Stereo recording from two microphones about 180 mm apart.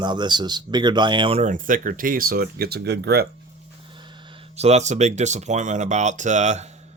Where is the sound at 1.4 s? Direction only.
45° right (ahead or behind); by 3.3 s 65° right (ahead or behind).